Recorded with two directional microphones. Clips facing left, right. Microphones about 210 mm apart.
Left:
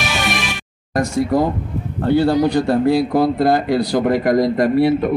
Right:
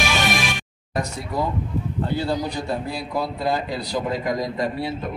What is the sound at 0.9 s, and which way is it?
A man's voice, 90° left.